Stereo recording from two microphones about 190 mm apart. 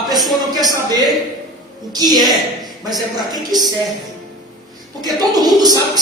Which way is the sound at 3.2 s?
20° right (ahead or behind).